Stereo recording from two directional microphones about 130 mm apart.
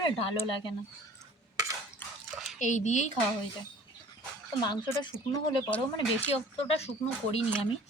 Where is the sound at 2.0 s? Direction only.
15° left (ahead or behind).